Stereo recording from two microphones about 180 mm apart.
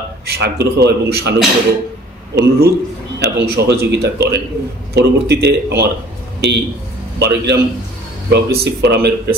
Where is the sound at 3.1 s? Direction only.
65° right (ahead or behind).